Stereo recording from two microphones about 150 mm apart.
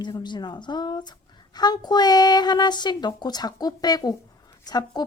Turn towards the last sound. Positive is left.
turn(degrees=25)  # may be behind; listen again after turning